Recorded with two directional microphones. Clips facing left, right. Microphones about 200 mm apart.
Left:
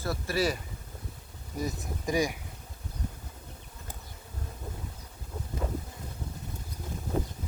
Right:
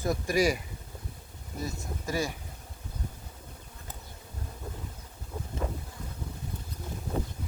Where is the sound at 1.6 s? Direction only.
15° left (ahead or behind).